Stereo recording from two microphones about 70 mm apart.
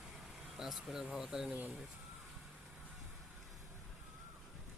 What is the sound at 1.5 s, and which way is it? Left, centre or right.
Speech, centre.